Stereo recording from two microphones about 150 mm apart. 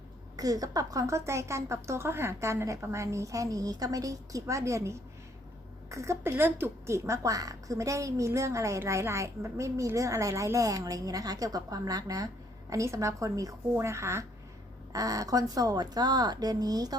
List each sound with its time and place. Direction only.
0.3 s a woman's voice: 25° right (ahead or behind)